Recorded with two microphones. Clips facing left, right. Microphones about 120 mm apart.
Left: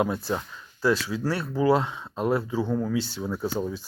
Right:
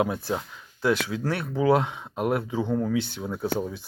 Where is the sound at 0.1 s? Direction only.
15° right (ahead or behind).